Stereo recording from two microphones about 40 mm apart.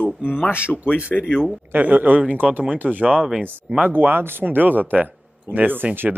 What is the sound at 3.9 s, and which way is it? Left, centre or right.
Speech, right.